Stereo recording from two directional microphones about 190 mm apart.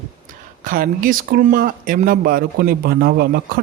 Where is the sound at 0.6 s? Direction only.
45° right (ahead or behind).